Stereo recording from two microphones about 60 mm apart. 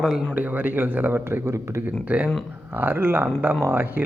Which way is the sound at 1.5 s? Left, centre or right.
Right.